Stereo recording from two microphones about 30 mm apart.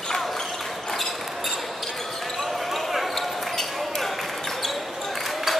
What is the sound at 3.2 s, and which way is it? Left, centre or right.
Basketball bounce, centre.